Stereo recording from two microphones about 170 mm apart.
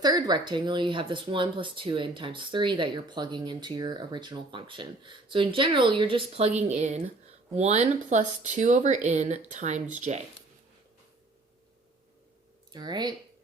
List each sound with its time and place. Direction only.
0.0 s speech: 25° right (ahead or behind); by 10.2 s 45° right (ahead or behind)
12.7 s speech: 25° right (ahead or behind)